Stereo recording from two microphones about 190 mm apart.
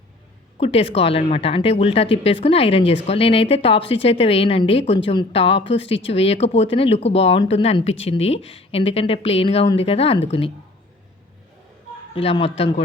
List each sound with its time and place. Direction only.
0.6 s a woman's voice: 30° left (ahead or behind)
12.1 s speech: 30° left (ahead or behind)